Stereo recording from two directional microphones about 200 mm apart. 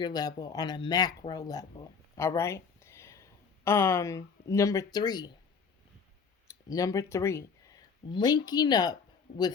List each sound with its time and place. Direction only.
0.0 s speech: 20° left (ahead or behind)
6.7 s speech: 15° left (ahead or behind)